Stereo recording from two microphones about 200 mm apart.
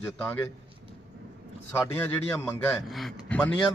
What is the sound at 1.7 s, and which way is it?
A man's voice, 10° left (ahead or behind).